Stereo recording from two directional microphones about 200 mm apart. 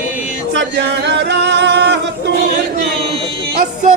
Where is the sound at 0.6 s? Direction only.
60° right (ahead or behind).